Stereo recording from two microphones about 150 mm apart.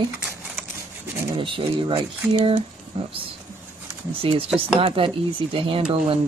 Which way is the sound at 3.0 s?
35° right (ahead or behind).